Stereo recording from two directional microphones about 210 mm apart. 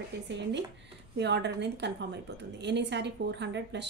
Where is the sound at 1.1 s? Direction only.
55° right (ahead or behind).